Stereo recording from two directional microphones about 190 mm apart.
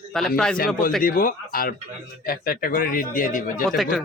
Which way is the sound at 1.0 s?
45° left (ahead or behind).